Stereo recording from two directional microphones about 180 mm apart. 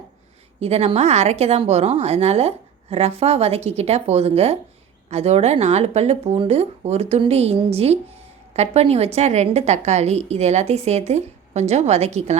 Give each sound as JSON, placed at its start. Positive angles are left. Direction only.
{"t": 0.6, "sound": "speech", "side_deg": -35}